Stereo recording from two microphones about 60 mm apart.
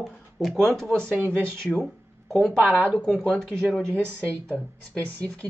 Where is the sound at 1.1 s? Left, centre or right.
Right.